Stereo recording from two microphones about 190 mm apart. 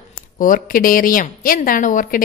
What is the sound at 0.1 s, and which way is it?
A woman's voice, 45° left (ahead or behind).